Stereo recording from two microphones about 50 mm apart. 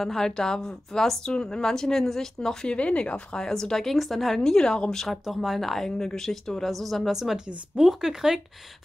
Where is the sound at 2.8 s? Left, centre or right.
Left.